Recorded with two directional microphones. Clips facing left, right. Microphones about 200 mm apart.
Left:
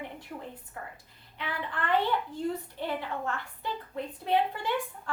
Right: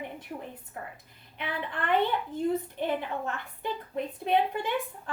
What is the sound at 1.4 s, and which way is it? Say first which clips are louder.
A child's voice: right 1 dB; 20° right (ahead or behind).